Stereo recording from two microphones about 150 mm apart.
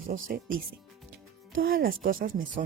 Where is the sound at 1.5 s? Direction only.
75° right (ahead or behind).